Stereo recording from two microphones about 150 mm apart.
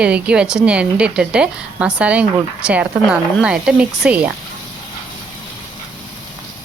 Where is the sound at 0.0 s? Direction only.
5° right (ahead or behind).